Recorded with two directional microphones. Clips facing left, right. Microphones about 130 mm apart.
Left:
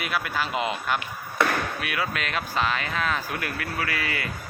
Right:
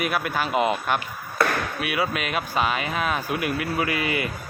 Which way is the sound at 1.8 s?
15° right (ahead or behind).